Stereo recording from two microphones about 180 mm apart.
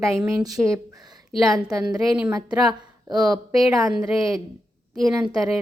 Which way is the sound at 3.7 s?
20° right (ahead or behind).